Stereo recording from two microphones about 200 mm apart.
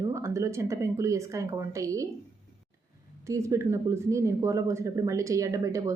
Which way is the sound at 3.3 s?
15° right (ahead or behind).